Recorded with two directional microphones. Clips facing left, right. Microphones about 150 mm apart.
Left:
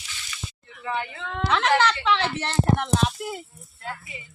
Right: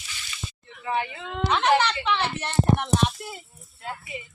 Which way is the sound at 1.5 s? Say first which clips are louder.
Even; 90° left.